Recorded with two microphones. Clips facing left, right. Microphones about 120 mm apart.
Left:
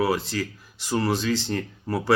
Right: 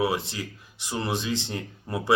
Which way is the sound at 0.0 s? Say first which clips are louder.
Left 3 dB; 20° right (ahead or behind).